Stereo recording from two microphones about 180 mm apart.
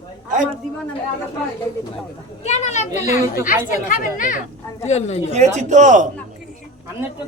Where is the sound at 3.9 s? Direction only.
50° left (ahead or behind).